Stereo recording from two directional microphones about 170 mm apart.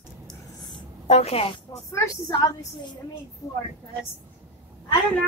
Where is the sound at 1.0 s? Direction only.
40° left (ahead or behind).